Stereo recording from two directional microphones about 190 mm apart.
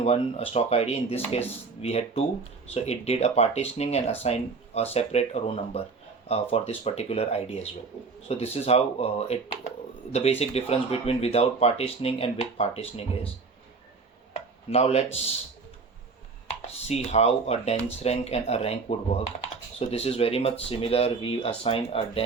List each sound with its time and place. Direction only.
0.0 s speech: 30° left (ahead or behind)
14.7 s speech: 35° left (ahead or behind)
16.6 s speech: 35° left (ahead or behind)